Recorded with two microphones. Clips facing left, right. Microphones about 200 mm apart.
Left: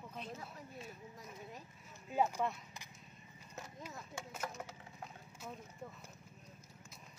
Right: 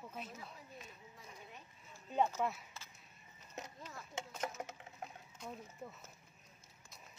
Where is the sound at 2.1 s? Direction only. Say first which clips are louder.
Even; 10° left (ahead or behind).